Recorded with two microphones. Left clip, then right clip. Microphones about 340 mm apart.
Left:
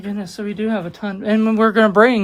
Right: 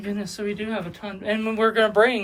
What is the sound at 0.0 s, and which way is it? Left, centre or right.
Speech, centre.